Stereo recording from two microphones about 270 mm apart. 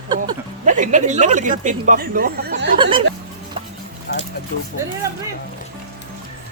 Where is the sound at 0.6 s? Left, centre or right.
Right.